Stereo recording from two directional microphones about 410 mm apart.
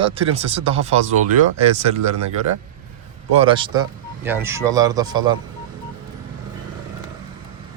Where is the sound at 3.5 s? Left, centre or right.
Centre.